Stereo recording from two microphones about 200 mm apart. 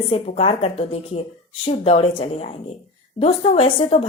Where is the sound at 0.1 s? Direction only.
30° left (ahead or behind).